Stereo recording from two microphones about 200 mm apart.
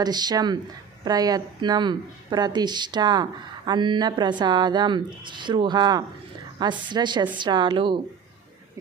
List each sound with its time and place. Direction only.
0.0 s speech: 20° right (ahead or behind)